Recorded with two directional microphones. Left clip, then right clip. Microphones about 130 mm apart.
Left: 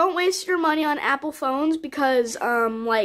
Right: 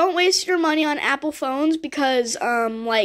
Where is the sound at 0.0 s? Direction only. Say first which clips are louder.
Right 3 dB; 10° right (ahead or behind).